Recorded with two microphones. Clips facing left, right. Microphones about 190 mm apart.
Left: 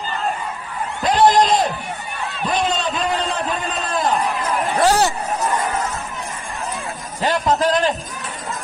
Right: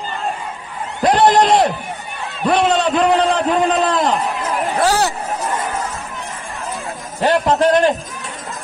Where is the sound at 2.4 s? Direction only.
70° right (ahead or behind).